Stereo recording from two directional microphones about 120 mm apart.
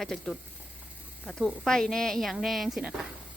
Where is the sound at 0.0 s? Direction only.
Centre (ahead or behind).